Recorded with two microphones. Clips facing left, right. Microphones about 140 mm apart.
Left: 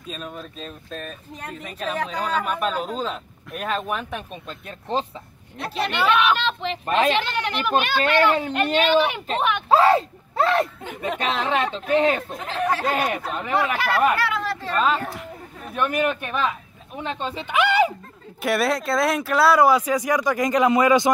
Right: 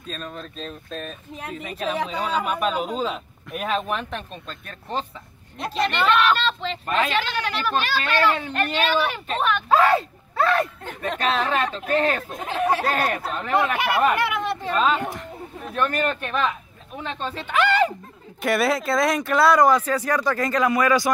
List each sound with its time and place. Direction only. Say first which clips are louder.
0.0 s speech: even; 10° left (ahead or behind)
4.3 s speech: left 2 dB; 15° left (ahead or behind)
5.7 s speech: even; 10° left (ahead or behind)
9.7 s speech: left 2 dB; 30° left (ahead or behind)
10.8 s speech: even; 15° left (ahead or behind)
13.1 s speech: right 1 dB; 5° left (ahead or behind)
13.7 s speech: even; 20° right (ahead or behind)
14.1 s chatter: right 1 dB; 20° right (ahead or behind)
15.1 s speech: right 1 dB; 10° left (ahead or behind)
18.4 s speech: even; centre (ahead or behind); by 21.1 s 20° left (ahead or behind)